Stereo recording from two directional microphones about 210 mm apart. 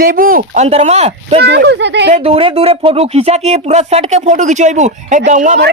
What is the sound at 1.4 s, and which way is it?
Speech, 50° right (ahead or behind).